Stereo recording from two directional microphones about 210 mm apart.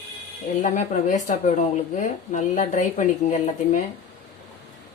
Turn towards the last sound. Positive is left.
turn(degrees=35)  # may be behind; listen again after turning